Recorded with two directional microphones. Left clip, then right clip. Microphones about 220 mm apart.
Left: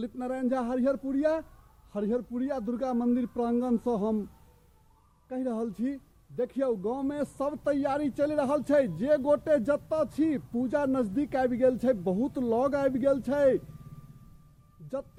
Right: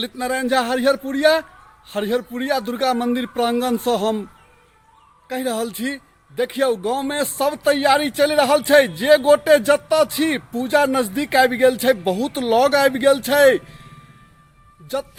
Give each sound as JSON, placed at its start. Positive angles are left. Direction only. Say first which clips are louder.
{"t": 0.0, "sound": "speech", "louder": "right 10 dB", "side_deg": -5}
{"t": 5.3, "sound": "speech", "louder": "right 10 dB", "side_deg": -5}
{"t": 12.1, "sound": "speech", "louder": "right 8 dB", "side_deg": -30}
{"t": 12.4, "sound": "speech", "louder": "right 12 dB", "side_deg": -5}